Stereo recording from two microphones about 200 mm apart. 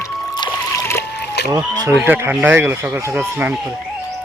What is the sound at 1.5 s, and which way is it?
Speech, 20° right (ahead or behind).